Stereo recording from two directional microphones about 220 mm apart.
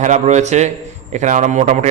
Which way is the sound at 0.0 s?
35° right (ahead or behind).